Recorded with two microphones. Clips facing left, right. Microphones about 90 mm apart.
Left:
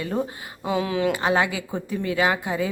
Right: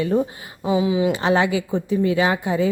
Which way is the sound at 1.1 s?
25° right (ahead or behind).